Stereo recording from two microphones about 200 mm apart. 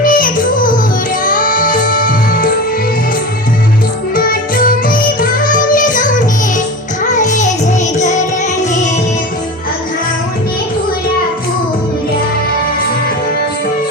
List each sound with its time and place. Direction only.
0.0 s music: 45° left (ahead or behind)
4.1 s music: 45° left (ahead or behind)